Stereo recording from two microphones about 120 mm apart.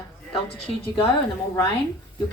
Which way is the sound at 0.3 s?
50° left (ahead or behind).